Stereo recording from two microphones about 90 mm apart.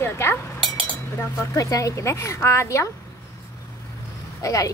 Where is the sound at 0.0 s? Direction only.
25° left (ahead or behind).